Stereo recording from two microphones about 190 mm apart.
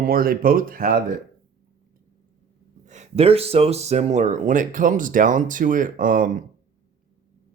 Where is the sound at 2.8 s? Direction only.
35° right (ahead or behind).